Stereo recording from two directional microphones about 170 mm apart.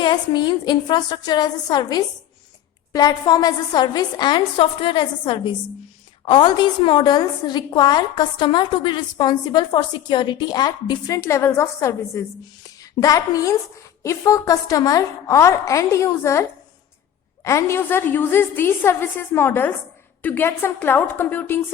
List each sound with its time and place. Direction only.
0.0 s a woman's voice: 25° left (ahead or behind)